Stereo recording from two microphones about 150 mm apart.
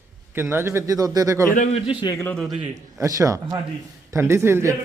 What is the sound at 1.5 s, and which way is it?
Speech, 60° left (ahead or behind).